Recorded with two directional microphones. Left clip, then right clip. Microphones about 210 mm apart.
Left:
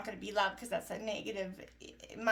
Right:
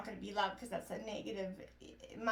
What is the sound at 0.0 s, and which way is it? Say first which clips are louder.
A woman's voice: left 4 dB; 35° left (ahead or behind).